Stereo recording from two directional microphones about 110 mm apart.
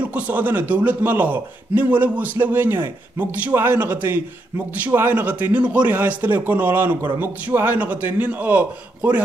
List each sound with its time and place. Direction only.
0.0 s a man's voice: 15° right (ahead or behind)